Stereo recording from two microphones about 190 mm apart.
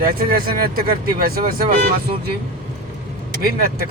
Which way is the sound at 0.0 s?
50° right (ahead or behind).